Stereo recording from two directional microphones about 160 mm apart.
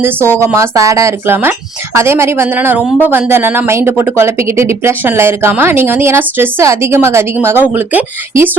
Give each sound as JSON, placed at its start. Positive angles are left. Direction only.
{"t": 0.0, "sound": "speech", "side_deg": -15}